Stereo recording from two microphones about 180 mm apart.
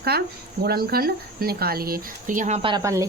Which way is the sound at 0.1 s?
60° right (ahead or behind).